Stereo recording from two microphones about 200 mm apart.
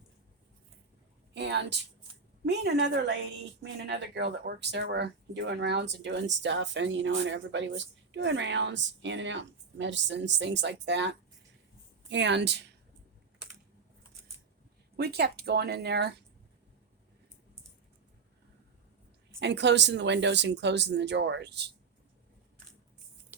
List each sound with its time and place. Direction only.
1.3 s a sound: 60° right (ahead or behind)
2.5 s speech: 60° right (ahead or behind)
14.9 s speech: 55° right (ahead or behind)
19.4 s speech: 60° right (ahead or behind)